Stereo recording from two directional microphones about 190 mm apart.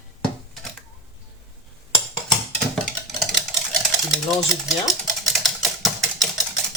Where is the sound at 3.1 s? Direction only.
Centre (ahead or behind).